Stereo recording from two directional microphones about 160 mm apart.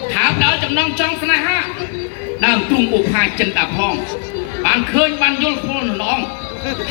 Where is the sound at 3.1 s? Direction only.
20° left (ahead or behind).